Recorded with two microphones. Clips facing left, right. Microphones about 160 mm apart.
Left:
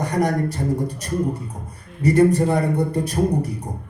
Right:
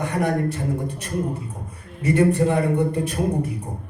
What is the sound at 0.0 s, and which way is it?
A man's voice, 40° left (ahead or behind).